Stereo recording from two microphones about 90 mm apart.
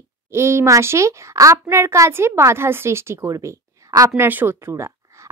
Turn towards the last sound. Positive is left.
turn(degrees=-30)  # may be behind; listen again after turning